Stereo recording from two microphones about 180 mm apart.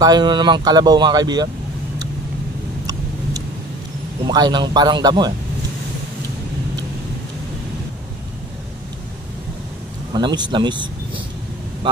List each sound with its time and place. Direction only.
0.0 s speech: 25° right (ahead or behind)
4.2 s speech: 25° right (ahead or behind)
10.1 s speech: 25° right (ahead or behind)